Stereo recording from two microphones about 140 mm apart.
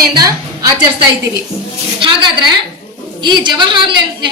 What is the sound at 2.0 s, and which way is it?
A woman's voice, 35° right (ahead or behind).